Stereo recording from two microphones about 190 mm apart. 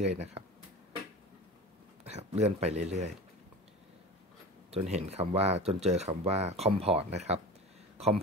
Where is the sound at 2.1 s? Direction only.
35° right (ahead or behind).